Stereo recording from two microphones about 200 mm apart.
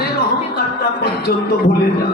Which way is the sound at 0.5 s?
50° left (ahead or behind).